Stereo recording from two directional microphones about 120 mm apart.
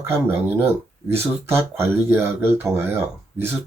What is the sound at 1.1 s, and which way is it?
Speech, 20° right (ahead or behind).